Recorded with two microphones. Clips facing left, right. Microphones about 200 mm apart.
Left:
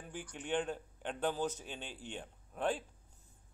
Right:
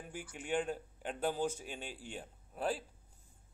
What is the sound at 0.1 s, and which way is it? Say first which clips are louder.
Speech: even; 10° right (ahead or behind).